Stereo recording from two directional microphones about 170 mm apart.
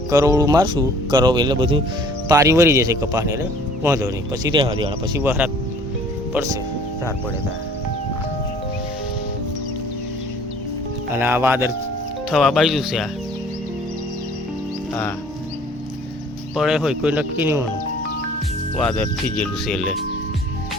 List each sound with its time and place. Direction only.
0.1 s speech: 20° right (ahead or behind)
5.2 s speech: 10° right (ahead or behind)
11.1 s speech: 10° right (ahead or behind)
12.3 s speech: centre (ahead or behind)
16.6 s speech: 5° right (ahead or behind)
18.8 s speech: 5° left (ahead or behind)